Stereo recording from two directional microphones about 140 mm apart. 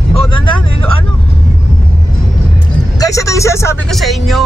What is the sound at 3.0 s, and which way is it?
Speech, 25° left (ahead or behind).